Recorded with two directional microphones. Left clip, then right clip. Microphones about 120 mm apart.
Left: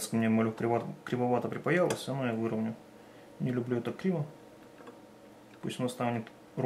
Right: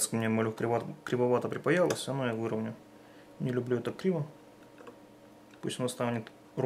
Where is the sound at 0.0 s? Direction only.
35° right (ahead or behind).